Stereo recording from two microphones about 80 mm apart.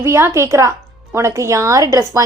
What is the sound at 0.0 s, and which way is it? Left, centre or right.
A woman's voice, right.